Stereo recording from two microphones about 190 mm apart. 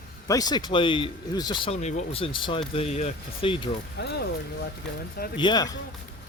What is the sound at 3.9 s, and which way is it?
Speech, 60° left (ahead or behind).